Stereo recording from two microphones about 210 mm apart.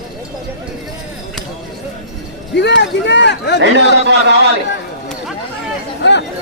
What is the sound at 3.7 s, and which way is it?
Speech, 55° right (ahead or behind).